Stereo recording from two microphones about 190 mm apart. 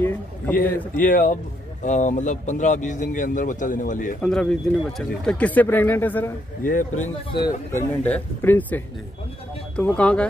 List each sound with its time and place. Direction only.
0.0 s a sound: 10° left (ahead or behind)
0.7 s speech: 10° left (ahead or behind)
1.0 s speech: 45° left (ahead or behind)
4.2 s speech: 5° left (ahead or behind)
6.6 s a man's voice: 45° left (ahead or behind)
8.0 s speech: 10° left (ahead or behind)